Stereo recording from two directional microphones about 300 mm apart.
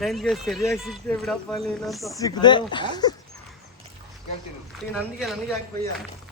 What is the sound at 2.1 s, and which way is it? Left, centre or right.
Speech, centre.